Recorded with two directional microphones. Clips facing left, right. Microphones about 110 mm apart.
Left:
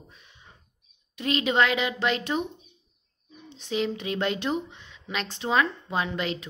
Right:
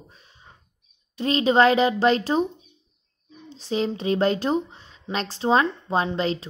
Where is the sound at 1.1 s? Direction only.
30° right (ahead or behind).